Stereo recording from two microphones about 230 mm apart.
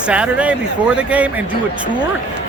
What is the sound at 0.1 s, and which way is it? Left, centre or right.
Speech, centre.